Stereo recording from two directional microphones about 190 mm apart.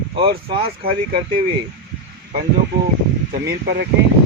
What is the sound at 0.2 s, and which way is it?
Speech, 25° right (ahead or behind).